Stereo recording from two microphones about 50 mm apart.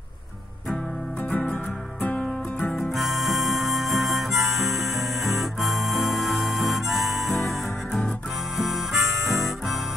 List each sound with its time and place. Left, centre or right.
2.7 s harmonica: centre